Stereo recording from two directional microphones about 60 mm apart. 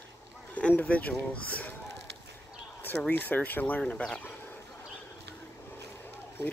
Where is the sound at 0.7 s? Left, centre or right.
Left.